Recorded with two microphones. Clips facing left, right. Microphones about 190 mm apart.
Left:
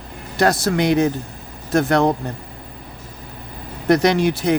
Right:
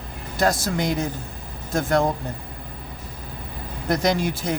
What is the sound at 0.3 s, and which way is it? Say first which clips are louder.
Speech: left 5 dB; 70° left (ahead or behind).